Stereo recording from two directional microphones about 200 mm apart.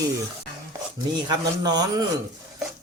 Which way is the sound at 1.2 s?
20° right (ahead or behind).